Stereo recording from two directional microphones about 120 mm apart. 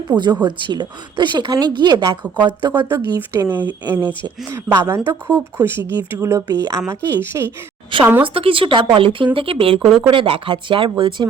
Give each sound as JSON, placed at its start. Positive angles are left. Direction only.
{"t": 0.2, "sound": "speech", "side_deg": -35}
{"t": 2.9, "sound": "speech", "side_deg": -20}
{"t": 6.5, "sound": "speech", "side_deg": -30}
{"t": 8.2, "sound": "speech", "side_deg": -50}